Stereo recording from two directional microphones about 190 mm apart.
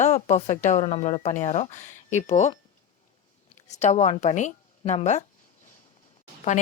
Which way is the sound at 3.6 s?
35° left (ahead or behind).